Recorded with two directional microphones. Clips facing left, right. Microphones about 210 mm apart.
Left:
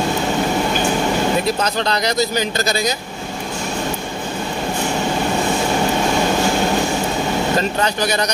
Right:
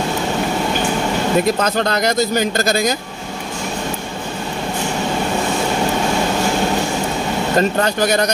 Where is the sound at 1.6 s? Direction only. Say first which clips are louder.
Right 2 dB; 50° right (ahead or behind).